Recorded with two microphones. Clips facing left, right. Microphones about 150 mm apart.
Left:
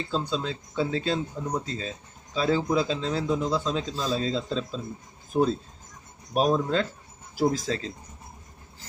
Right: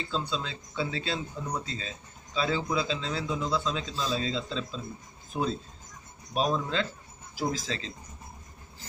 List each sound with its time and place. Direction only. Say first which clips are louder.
0.1 s speech: left 4 dB; 45° left (ahead or behind)